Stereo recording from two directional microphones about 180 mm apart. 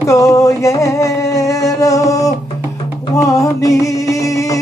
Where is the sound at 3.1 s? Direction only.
20° left (ahead or behind).